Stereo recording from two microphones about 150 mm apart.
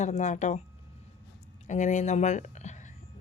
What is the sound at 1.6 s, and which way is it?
Speech, 55° left (ahead or behind).